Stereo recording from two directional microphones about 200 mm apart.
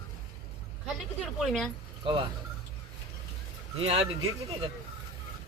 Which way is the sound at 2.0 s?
25° right (ahead or behind).